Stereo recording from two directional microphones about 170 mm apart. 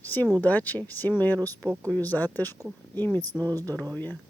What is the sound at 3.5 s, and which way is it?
Speech, 20° right (ahead or behind).